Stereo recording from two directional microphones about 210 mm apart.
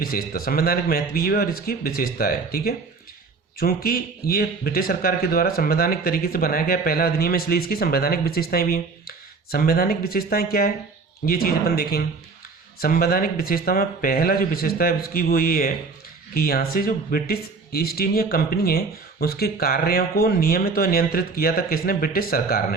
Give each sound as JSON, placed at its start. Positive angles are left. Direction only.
{"t": 0.0, "sound": "speech", "side_deg": 45}